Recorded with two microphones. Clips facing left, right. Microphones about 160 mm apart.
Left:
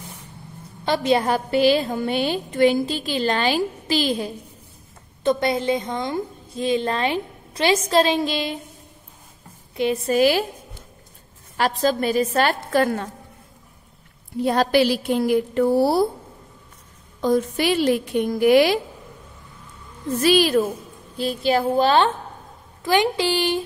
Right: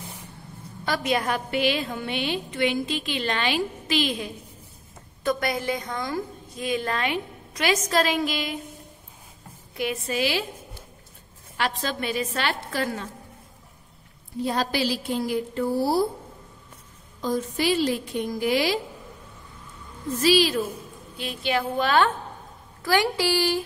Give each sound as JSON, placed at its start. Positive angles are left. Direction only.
{"t": 0.8, "sound": "a woman's voice", "side_deg": 30}
{"t": 10.0, "sound": "a woman's voice", "side_deg": 45}
{"t": 11.5, "sound": "a woman's voice", "side_deg": 40}
{"t": 14.4, "sound": "a woman's voice", "side_deg": 65}
{"t": 17.2, "sound": "a woman's voice", "side_deg": 65}
{"t": 20.2, "sound": "a woman's voice", "side_deg": 55}
{"t": 21.2, "sound": "a woman's voice", "side_deg": 35}